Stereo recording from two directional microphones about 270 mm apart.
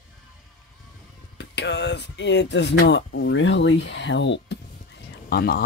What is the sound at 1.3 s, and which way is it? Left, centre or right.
Speech, left.